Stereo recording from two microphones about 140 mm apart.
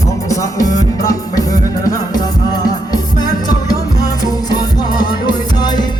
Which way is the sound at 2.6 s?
30° left (ahead or behind).